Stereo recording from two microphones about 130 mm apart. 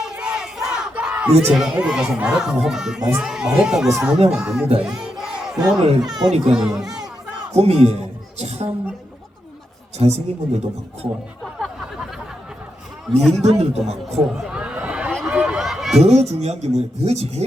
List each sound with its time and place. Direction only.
0.1 s crowd: 5° right (ahead or behind)
3.2 s speech: 5° right (ahead or behind)
4.8 s crowd: 5° right (ahead or behind)
6.0 s speech: 5° right (ahead or behind)
7.5 s a man's voice: 55° right (ahead or behind)
10.0 s a man's voice: 55° right (ahead or behind)
13.1 s speech: centre (ahead or behind)
13.4 s speech: 55° right (ahead or behind)
14.0 s a sound: centre (ahead or behind)
15.3 s run: 10° right (ahead or behind)
16.0 s speech: 55° right (ahead or behind)